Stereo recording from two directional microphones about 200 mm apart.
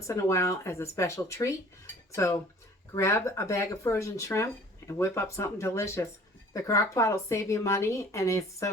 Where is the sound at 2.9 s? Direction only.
15° left (ahead or behind).